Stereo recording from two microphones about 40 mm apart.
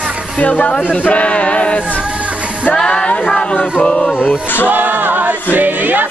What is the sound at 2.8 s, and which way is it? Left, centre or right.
Speech, left.